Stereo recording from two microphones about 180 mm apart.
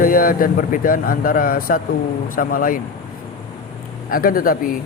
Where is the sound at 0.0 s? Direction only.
50° left (ahead or behind).